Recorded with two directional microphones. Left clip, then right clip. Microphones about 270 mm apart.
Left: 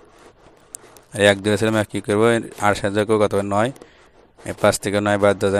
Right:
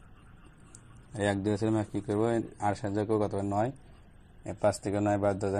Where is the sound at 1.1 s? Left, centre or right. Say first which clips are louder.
Left 14 dB; left.